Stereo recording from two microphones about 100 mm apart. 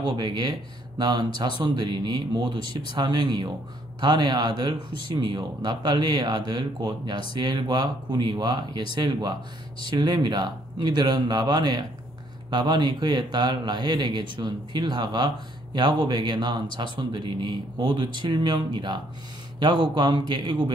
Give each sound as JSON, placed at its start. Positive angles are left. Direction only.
{"t": 0.1, "sound": "speech", "side_deg": -45}